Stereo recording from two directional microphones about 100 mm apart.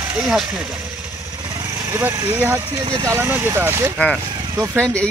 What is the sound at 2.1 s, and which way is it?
Speech, 20° right (ahead or behind).